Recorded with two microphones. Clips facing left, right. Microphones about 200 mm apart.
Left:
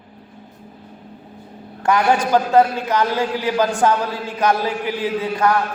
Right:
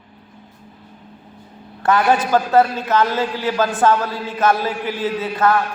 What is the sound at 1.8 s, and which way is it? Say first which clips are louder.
A man's voice: right 1 dB; 15° left (ahead or behind).